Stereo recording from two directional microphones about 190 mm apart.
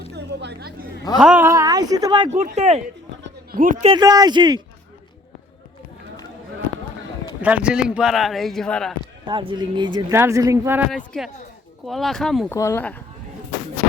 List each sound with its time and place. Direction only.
0.1 s speech: 60° right (ahead or behind)
1.2 s speech: 10° right (ahead or behind)
2.3 s speech: 35° right (ahead or behind)
3.2 s a sound: 50° right (ahead or behind)
3.8 s speech: 20° right (ahead or behind)
7.4 s speech: 5° right (ahead or behind)
9.2 s speech: 25° right (ahead or behind)
10.9 s speech: 5° left (ahead or behind)
12.5 s speech: 15° left (ahead or behind)